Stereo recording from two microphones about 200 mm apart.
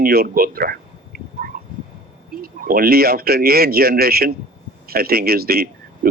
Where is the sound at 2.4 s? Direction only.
45° right (ahead or behind).